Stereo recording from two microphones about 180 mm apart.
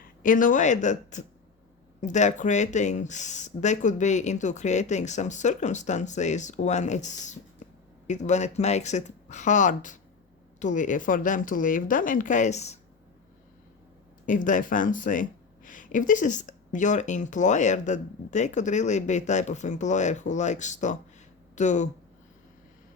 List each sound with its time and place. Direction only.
0.2 s speech: 50° left (ahead or behind)
14.3 s speech: 45° left (ahead or behind)